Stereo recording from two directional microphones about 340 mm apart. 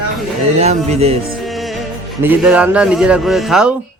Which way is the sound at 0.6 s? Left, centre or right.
Centre.